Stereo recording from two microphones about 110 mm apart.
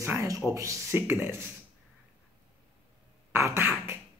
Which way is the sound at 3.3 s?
25° right (ahead or behind).